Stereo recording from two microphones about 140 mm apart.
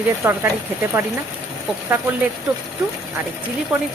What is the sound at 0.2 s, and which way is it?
Speech, 15° right (ahead or behind).